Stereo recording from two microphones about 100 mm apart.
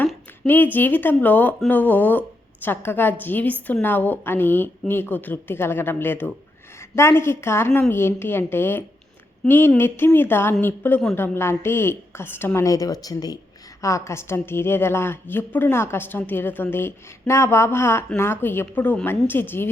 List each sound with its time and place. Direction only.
0.4 s speech: 20° left (ahead or behind); by 13.4 s 40° left (ahead or behind)
13.8 s speech: 30° left (ahead or behind)